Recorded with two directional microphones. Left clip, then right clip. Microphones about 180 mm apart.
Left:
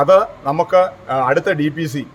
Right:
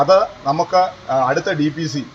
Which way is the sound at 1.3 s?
35° left (ahead or behind).